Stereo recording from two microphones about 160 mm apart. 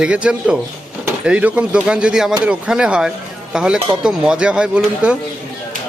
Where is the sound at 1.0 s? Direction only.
10° right (ahead or behind).